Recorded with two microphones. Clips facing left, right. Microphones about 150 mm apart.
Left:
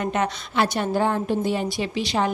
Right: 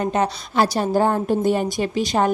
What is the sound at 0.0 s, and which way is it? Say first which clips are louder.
A woman's voice: right 3 dB; 35° right (ahead or behind).